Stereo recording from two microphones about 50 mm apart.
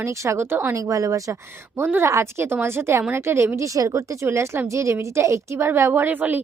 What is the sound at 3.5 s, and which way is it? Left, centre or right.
Speech, right.